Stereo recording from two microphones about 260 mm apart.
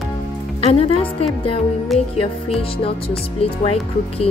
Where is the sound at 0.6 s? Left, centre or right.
Left.